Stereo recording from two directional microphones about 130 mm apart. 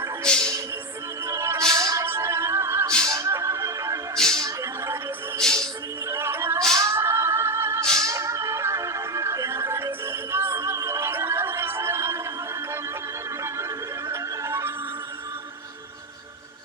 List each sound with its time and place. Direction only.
0.3 s music: 5° left (ahead or behind)
1.2 s music: 20° right (ahead or behind)
5.4 s music: 5° left (ahead or behind)
6.1 s music: 20° right (ahead or behind)